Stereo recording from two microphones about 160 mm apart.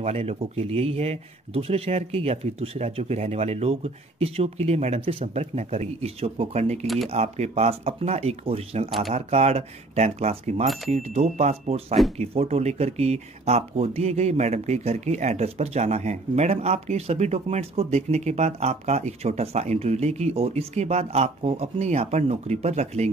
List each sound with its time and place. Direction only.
0.0 s speech: 40° right (ahead or behind)